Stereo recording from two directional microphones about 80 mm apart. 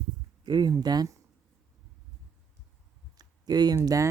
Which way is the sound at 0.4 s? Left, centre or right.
Right.